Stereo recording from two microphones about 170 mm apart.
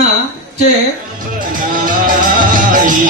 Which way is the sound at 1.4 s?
55° right (ahead or behind).